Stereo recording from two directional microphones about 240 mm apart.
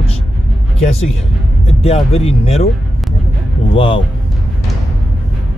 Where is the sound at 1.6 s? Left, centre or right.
Left.